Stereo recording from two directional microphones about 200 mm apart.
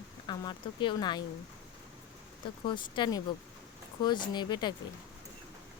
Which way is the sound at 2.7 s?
25° left (ahead or behind).